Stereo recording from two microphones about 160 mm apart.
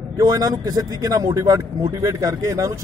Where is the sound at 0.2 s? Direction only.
20° right (ahead or behind).